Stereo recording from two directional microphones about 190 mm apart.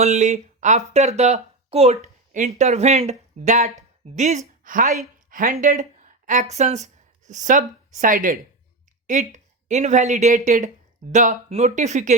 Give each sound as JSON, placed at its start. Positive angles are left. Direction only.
{"t": 0.0, "sound": "speech", "side_deg": -35}